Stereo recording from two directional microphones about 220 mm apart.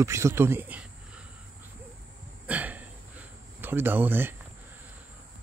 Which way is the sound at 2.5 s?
5° right (ahead or behind).